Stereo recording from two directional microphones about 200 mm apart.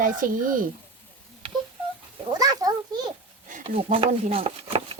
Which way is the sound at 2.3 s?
20° right (ahead or behind).